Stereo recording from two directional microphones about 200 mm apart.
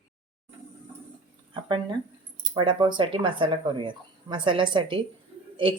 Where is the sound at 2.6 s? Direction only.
25° right (ahead or behind).